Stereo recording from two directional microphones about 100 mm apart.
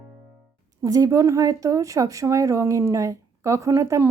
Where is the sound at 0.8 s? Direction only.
35° right (ahead or behind).